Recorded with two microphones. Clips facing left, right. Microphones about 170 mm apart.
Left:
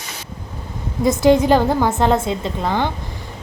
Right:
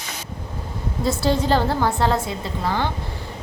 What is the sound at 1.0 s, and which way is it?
A woman's voice, 15° left (ahead or behind).